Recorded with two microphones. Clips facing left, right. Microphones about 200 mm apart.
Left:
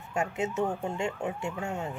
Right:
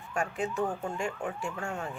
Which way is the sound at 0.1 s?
25° left (ahead or behind).